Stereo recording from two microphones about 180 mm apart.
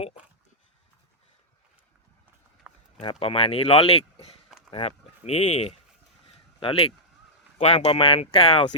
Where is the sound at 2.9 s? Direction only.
30° left (ahead or behind).